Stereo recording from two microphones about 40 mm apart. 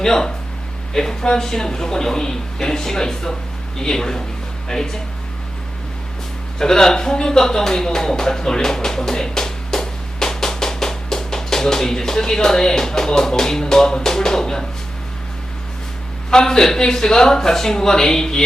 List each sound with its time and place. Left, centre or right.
0.0 s speech: centre
6.6 s speech: centre
16.3 s speech: centre